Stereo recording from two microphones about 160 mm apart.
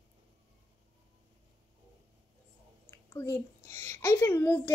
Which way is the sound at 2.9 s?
20° left (ahead or behind).